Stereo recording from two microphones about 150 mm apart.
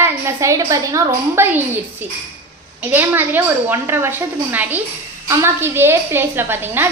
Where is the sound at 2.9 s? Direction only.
15° right (ahead or behind).